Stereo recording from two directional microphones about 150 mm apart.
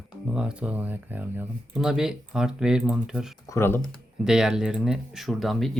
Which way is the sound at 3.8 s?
5° right (ahead or behind).